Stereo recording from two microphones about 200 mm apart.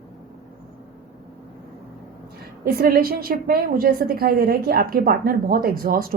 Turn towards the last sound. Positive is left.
turn(degrees=-45)  # may be behind; listen again after turning